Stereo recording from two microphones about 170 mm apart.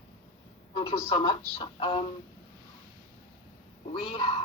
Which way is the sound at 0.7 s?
30° left (ahead or behind).